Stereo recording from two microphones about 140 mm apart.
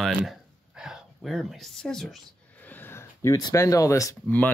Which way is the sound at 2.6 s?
15° left (ahead or behind).